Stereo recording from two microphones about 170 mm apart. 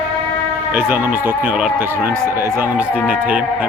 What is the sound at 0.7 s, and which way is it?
Speech, 10° right (ahead or behind).